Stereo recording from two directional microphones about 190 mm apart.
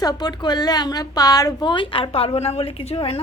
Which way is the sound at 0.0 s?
20° left (ahead or behind).